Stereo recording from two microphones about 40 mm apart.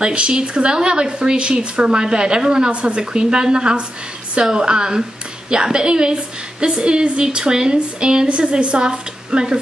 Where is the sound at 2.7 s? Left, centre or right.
Right.